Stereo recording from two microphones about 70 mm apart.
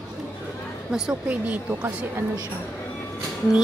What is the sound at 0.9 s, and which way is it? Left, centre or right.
Speech, centre.